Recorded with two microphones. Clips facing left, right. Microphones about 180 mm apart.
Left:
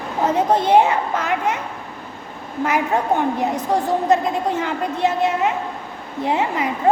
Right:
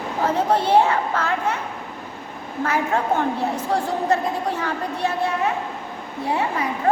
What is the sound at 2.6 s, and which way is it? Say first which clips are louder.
A woman's voice: left 2 dB; 15° left (ahead or behind).